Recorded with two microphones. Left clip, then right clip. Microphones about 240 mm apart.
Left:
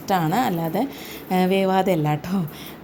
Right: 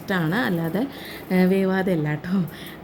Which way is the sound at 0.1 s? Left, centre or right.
Centre.